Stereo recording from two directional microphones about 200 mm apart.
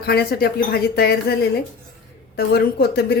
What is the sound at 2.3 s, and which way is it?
Speech, 50° left (ahead or behind).